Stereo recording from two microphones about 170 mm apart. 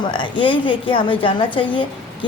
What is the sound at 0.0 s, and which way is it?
A woman's voice, 25° left (ahead or behind).